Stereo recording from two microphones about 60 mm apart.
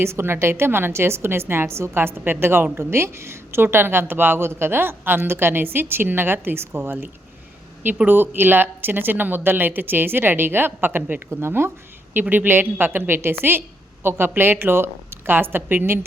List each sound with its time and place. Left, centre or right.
0.0 s a woman's voice: right
12.3 s a woman's voice: right